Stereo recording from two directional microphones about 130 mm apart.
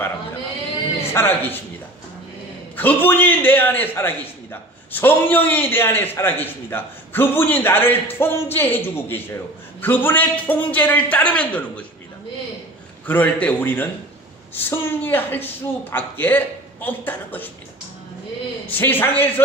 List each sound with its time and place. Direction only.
1.1 s a man's voice: 20° left (ahead or behind)
2.7 s a man's voice: 15° left (ahead or behind)
13.1 s a man's voice: 15° left (ahead or behind)
18.6 s a man's voice: 15° left (ahead or behind)